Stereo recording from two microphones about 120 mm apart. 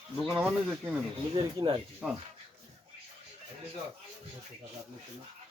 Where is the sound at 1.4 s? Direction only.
45° right (ahead or behind).